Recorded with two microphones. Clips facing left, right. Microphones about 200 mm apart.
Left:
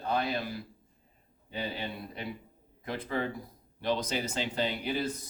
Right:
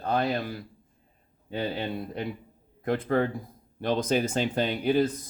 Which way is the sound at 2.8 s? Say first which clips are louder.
Right 8 dB; 55° right (ahead or behind).